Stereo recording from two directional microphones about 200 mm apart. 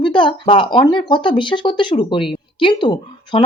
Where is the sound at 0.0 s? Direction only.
25° left (ahead or behind).